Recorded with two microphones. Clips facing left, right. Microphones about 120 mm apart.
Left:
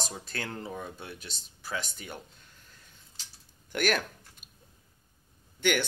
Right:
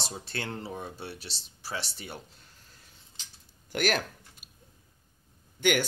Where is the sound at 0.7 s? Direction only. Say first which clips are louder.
Right 1 dB; 30° right (ahead or behind).